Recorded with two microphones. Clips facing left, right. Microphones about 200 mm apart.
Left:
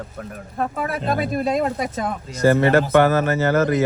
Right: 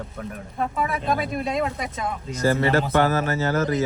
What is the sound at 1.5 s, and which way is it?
Speech, 50° left (ahead or behind).